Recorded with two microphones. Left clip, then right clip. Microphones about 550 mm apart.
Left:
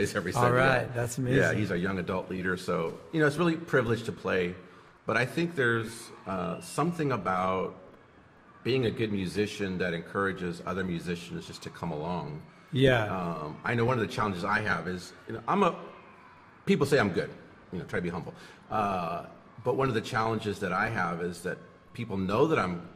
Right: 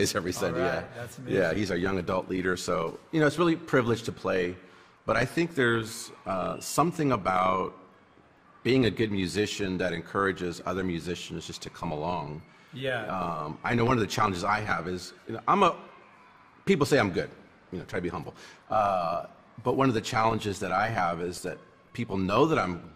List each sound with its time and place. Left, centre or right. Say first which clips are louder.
0.0 s speech: right 2 dB; right
1.4 s speech: right 3 dB; right
8.6 s speech: right 3 dB; right
12.7 s speech: left 7 dB; left
13.2 s a man's voice: right 3 dB; right